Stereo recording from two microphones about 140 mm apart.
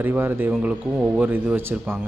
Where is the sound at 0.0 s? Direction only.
15° right (ahead or behind).